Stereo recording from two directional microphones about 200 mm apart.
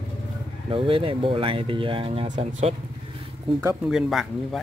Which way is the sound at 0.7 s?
25° right (ahead or behind).